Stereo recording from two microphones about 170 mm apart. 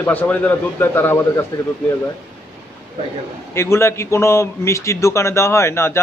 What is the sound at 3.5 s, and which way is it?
A man's voice, 15° left (ahead or behind).